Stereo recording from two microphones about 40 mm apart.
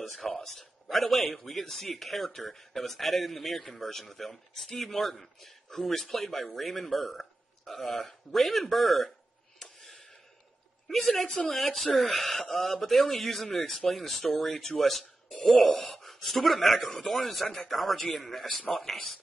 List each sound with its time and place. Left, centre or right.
0.2 s a man's voice: centre
9.6 s a sound: centre
11.2 s speech: left
11.5 s a man's voice: centre